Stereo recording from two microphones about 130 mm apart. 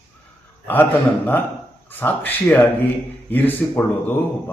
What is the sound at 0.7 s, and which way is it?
A man's voice, 15° left (ahead or behind).